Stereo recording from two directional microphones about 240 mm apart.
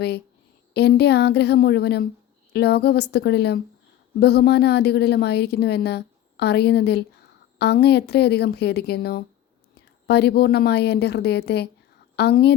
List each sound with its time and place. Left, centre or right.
0.7 s a woman's voice: left